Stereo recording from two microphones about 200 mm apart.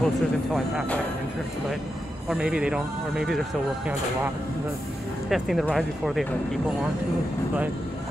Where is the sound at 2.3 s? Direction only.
5° right (ahead or behind).